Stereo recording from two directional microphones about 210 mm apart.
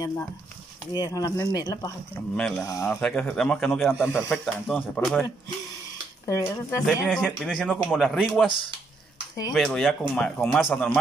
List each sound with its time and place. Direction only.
0.9 s speech: 20° left (ahead or behind)
2.3 s speech: 5° left (ahead or behind)
2.6 s speech: 15° left (ahead or behind)
2.9 s speech: 5° left (ahead or behind)
6.2 s speech: 15° left (ahead or behind)
6.9 s speech: centre (ahead or behind)
9.5 s speech: centre (ahead or behind)